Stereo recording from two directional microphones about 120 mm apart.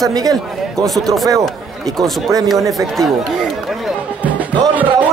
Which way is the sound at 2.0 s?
30° right (ahead or behind).